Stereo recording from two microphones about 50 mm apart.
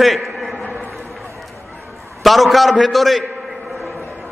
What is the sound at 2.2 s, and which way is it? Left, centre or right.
A man's voice, centre.